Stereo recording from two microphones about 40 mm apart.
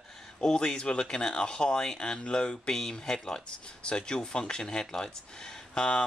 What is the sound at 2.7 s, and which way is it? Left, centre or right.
Speech, centre.